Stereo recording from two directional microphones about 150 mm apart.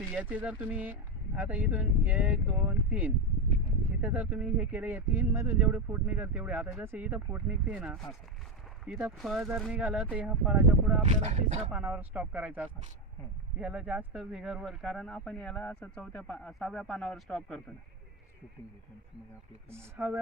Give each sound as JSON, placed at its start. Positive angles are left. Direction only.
{"t": 0.1, "sound": "speech", "side_deg": -10}
{"t": 11.1, "sound": "speech", "side_deg": -45}
{"t": 11.7, "sound": "speech", "side_deg": -10}
{"t": 19.7, "sound": "speech", "side_deg": -15}